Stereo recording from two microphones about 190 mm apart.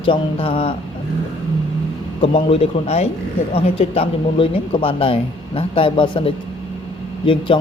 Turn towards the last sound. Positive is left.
turn(degrees=25)  # may be behind; listen again after turning